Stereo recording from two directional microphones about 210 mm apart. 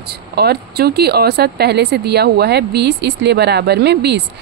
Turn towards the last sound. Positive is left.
turn(degrees=-50)  # may be behind; listen again after turning